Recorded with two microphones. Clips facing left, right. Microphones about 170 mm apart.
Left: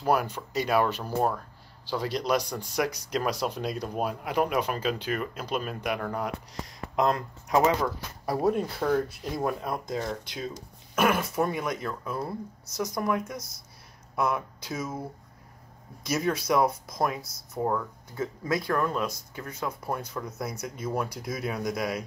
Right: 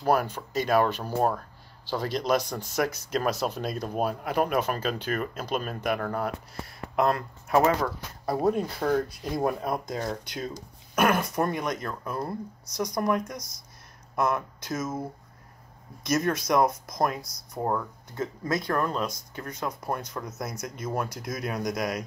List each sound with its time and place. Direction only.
0.0 s speech: 10° left (ahead or behind)
16.0 s speech: 10° left (ahead or behind)
17.6 s speech: 5° right (ahead or behind)
18.1 s speech: 10° left (ahead or behind)
18.7 s speech: 25° right (ahead or behind)
19.0 s speech: 10° left (ahead or behind)